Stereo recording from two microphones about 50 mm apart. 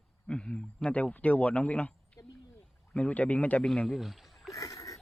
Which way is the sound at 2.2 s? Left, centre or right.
Left.